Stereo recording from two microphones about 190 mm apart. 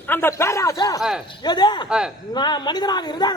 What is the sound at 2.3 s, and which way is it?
A woman's voice, 20° left (ahead or behind).